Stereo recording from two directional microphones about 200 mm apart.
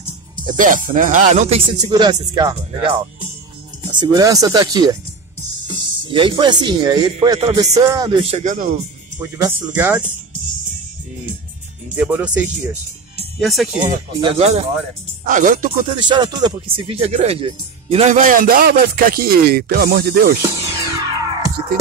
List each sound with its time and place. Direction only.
0.5 s speech: 40° right (ahead or behind)
9.8 s speech: 10° right (ahead or behind)
11.9 s speech: 5° right (ahead or behind)
14.2 s speech: 35° right (ahead or behind)
15.9 s speech: 20° right (ahead or behind); by 20.3 s 50° right (ahead or behind)
20.5 s music: 15° right (ahead or behind)